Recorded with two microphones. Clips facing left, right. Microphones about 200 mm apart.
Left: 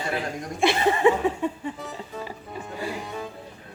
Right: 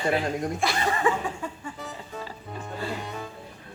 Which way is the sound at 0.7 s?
25° left (ahead or behind).